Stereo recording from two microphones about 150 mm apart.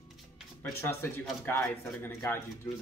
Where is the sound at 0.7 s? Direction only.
15° left (ahead or behind).